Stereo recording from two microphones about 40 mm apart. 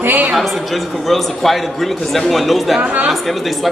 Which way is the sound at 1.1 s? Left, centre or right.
Centre.